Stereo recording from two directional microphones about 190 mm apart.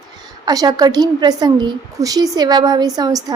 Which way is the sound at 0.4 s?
20° right (ahead or behind).